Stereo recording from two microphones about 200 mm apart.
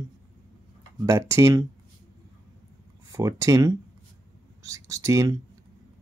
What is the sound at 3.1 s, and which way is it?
Speech, 15° right (ahead or behind).